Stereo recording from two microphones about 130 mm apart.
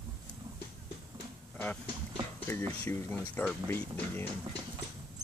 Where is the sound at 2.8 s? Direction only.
20° left (ahead or behind).